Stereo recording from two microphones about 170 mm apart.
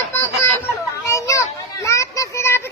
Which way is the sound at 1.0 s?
15° left (ahead or behind).